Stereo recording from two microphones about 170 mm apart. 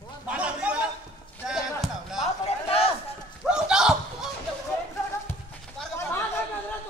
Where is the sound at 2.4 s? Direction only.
35° left (ahead or behind).